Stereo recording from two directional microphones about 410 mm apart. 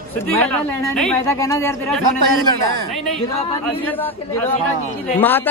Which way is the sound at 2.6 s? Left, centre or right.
Right.